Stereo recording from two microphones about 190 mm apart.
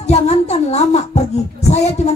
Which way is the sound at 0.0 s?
35° left (ahead or behind).